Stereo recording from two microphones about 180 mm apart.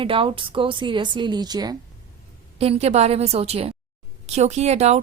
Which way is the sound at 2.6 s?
35° right (ahead or behind).